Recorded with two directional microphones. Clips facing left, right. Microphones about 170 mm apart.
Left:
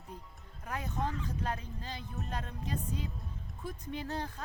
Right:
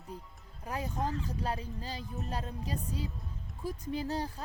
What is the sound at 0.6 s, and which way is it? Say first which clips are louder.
A woman's voice: right 2 dB; 30° right (ahead or behind).